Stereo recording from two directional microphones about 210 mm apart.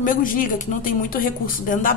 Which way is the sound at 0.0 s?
40° left (ahead or behind).